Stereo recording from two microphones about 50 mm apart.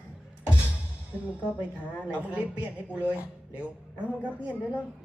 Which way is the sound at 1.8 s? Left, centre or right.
Left.